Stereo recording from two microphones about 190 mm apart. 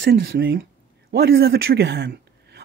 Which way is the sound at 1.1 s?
55° right (ahead or behind).